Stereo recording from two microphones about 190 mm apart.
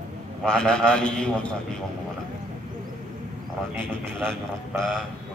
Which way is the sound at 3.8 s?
5° left (ahead or behind).